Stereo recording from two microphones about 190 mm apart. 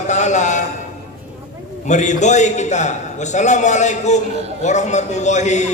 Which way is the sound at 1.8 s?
40° left (ahead or behind).